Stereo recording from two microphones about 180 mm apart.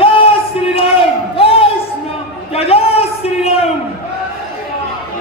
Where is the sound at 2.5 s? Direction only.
35° left (ahead or behind).